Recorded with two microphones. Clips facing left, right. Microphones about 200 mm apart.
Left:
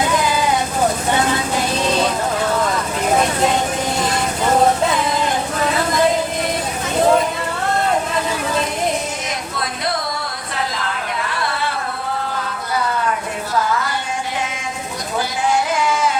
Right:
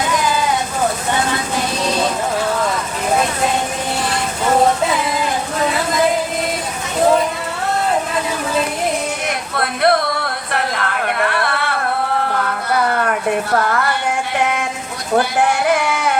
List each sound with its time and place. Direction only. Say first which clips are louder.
9.6 s music: right 10 dB; 65° right (ahead or behind)
10.5 s a sound: right 3 dB; 65° right (ahead or behind)
15.2 s music: even; 60° right (ahead or behind)